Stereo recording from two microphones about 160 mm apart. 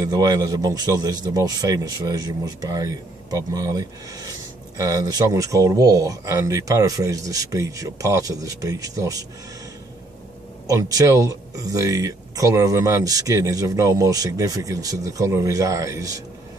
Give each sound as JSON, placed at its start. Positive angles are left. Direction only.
{"t": 0.0, "sound": "speech", "side_deg": -20}
{"t": 10.7, "sound": "speech", "side_deg": -20}